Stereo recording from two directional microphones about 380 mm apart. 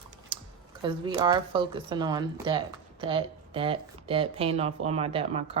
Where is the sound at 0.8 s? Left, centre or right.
Centre.